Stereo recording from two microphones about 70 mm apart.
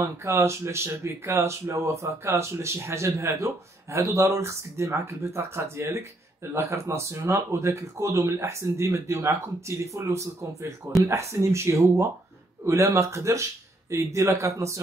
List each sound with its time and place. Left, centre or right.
0.0 s speech: right